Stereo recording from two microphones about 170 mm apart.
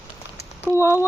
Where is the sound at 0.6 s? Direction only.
15° left (ahead or behind).